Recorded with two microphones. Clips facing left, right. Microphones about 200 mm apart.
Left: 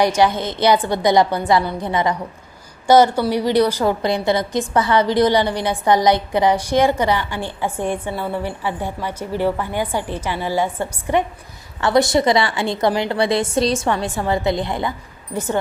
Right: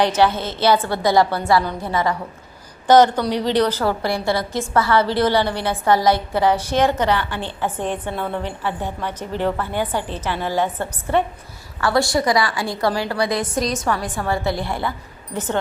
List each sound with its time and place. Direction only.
0.0 s a woman's voice: 10° left (ahead or behind)